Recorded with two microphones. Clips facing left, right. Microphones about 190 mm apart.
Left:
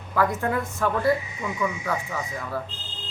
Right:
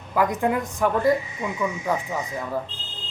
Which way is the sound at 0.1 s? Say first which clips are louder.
Right 2 dB; 15° right (ahead or behind).